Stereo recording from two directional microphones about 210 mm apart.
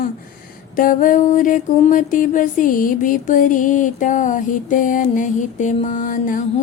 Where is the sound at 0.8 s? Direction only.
40° left (ahead or behind).